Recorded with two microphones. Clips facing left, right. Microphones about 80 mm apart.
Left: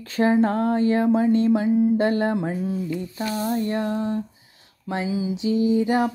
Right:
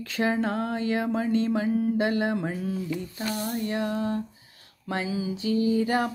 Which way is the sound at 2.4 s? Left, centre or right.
Left.